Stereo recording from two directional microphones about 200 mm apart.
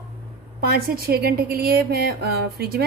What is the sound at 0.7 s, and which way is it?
A woman's voice, 50° right (ahead or behind).